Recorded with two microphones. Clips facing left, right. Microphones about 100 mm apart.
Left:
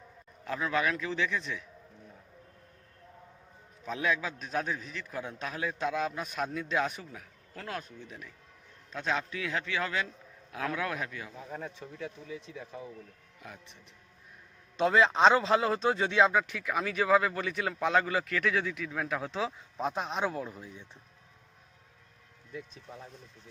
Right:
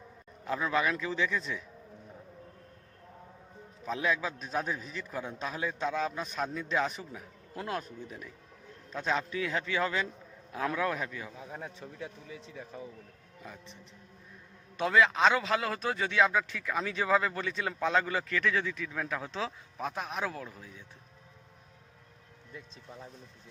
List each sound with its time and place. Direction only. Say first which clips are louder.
0.4 s a man's voice: right 1 dB; 5° right (ahead or behind)
3.8 s a man's voice: even; centre (ahead or behind)
7.1 s speech: right 3 dB; 10° right (ahead or behind)
8.0 s a man's voice: right 3 dB; 5° right (ahead or behind)
10.7 s a man's voice: right 2 dB; centre (ahead or behind)
14.8 s a man's voice: left 2 dB; 25° left (ahead or behind)